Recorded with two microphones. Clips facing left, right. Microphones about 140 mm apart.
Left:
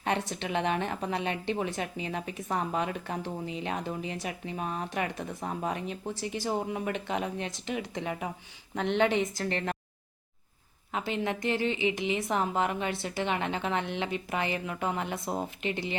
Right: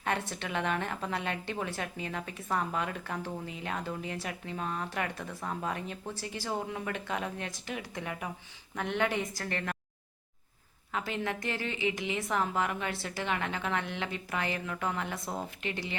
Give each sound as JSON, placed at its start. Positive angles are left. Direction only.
{"t": 0.0, "sound": "a woman's voice", "side_deg": 20}
{"t": 10.9, "sound": "a woman's voice", "side_deg": 20}